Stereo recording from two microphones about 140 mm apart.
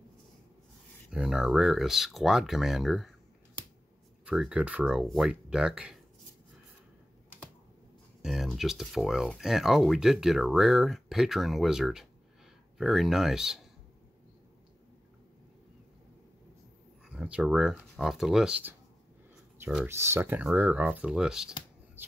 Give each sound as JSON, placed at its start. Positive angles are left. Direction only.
{"t": 1.1, "sound": "speech", "side_deg": -5}
{"t": 4.3, "sound": "speech", "side_deg": -5}
{"t": 8.2, "sound": "speech", "side_deg": 0}
{"t": 17.1, "sound": "speech", "side_deg": -5}
{"t": 19.9, "sound": "speech", "side_deg": -20}